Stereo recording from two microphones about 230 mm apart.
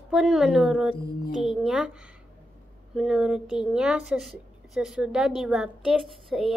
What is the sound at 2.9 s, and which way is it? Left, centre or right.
Speech, centre.